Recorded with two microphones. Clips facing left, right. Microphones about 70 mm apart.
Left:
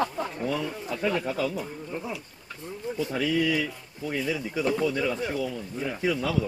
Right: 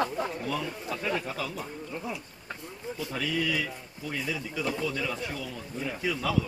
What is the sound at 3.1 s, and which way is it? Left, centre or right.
Speech, centre.